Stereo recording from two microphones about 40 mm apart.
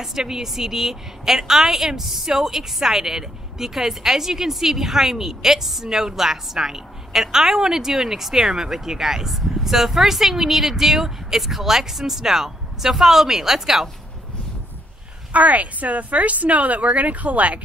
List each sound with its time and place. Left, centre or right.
0.0 s a woman's voice: centre
15.3 s speech: right